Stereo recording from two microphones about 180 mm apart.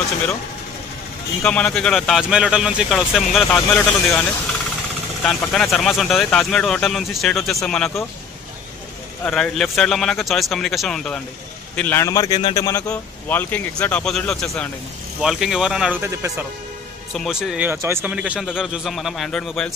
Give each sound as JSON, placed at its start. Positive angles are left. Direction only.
{"t": 1.4, "sound": "speech", "side_deg": 5}
{"t": 9.2, "sound": "a man's voice", "side_deg": 0}